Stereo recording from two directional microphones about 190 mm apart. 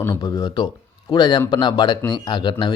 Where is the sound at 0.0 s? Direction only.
15° left (ahead or behind).